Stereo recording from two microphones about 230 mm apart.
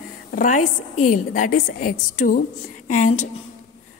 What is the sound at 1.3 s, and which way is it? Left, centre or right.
A woman's voice, left.